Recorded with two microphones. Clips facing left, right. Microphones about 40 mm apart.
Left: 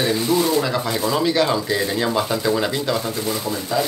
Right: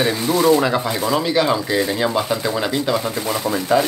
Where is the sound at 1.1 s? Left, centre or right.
Centre.